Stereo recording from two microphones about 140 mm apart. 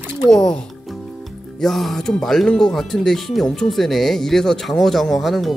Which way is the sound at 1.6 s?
Centre (ahead or behind).